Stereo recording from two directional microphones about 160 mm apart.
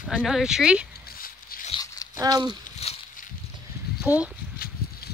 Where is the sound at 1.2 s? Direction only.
65° left (ahead or behind).